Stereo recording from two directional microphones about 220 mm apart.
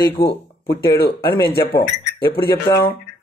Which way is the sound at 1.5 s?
45° left (ahead or behind).